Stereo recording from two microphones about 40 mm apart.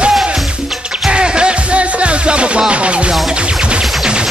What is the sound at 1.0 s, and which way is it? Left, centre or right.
Music, right.